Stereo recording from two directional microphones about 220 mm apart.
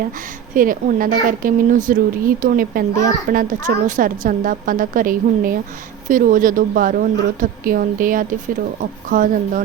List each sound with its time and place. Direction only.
0.5 s a woman's voice: 40° right (ahead or behind)